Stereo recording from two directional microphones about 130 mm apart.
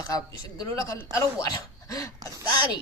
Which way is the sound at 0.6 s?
15° left (ahead or behind).